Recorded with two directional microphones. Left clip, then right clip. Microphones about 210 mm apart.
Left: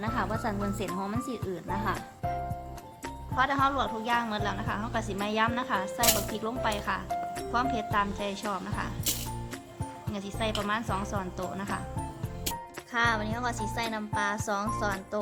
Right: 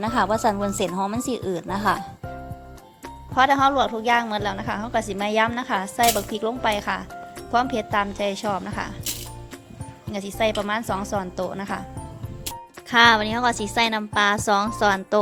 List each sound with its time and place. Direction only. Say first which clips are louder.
0.0 s a woman's voice: right 11 dB; 35° right (ahead or behind)
3.3 s a woman's voice: right 9 dB; 30° right (ahead or behind)
10.1 s a woman's voice: right 10 dB; 30° right (ahead or behind)
12.9 s a woman's voice: right 12 dB; 40° right (ahead or behind)